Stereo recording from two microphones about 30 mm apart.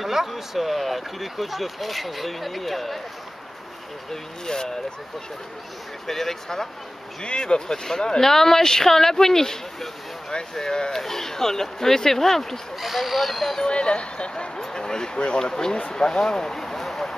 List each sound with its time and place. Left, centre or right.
0.0 s speech: centre
4.1 s speech: centre
6.0 s speech: centre
7.2 s speech: left
8.2 s speech: centre
10.9 s speech: centre
12.8 s speech: centre
13.7 s speech: left
14.6 s speech: left; by 17.0 s centre